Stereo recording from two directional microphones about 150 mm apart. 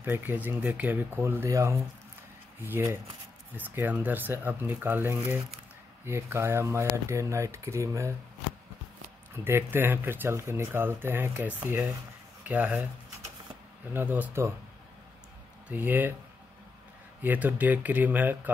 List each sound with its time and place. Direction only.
0.0 s speech: 15° right (ahead or behind)
9.3 s speech: 15° right (ahead or behind)
13.9 s speech: 10° right (ahead or behind)
15.7 s speech: 10° right (ahead or behind)
17.2 s speech: 10° right (ahead or behind)